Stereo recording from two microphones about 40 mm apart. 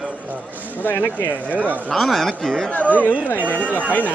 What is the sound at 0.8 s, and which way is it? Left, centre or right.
Speech, left.